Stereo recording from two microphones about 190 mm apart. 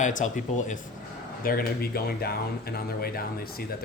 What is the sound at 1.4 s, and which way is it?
Speech, 50° left (ahead or behind).